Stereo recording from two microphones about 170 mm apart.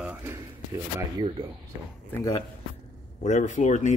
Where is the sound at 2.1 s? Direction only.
20° left (ahead or behind).